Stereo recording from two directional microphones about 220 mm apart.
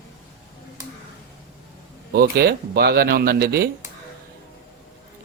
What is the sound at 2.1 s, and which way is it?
A man's voice, 50° right (ahead or behind).